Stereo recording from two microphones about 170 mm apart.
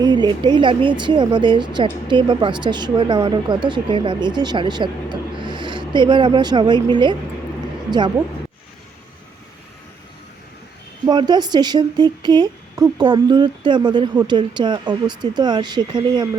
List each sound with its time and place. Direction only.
0.0 s speech: 25° right (ahead or behind)
11.0 s speech: 25° right (ahead or behind)